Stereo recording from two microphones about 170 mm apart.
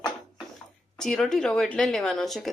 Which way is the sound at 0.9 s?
5° left (ahead or behind).